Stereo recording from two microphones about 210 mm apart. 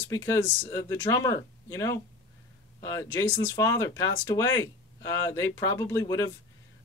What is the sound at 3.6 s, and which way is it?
Speech, 15° left (ahead or behind).